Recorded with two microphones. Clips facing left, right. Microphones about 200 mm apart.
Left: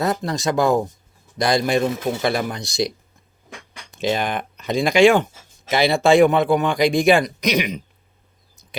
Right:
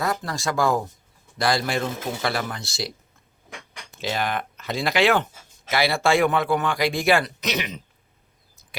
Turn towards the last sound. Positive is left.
turn(degrees=15)  # may be behind; listen again after turning